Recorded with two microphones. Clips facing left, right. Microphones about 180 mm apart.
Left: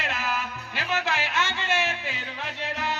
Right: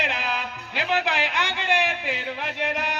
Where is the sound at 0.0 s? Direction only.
15° right (ahead or behind).